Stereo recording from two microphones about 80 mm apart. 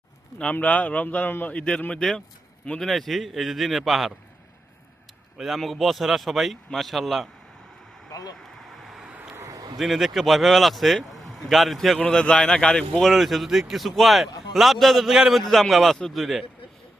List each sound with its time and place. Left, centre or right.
0.5 s a man's voice: centre
5.4 s a man's voice: centre
8.4 s vehicle: centre
9.3 s a sound: right
9.7 s a man's voice: centre
11.9 s a man's voice: centre